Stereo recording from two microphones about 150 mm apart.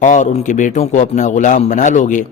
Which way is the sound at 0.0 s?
55° left (ahead or behind).